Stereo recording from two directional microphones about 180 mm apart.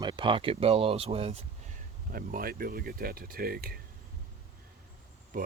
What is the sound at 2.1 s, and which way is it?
Speech, 55° right (ahead or behind).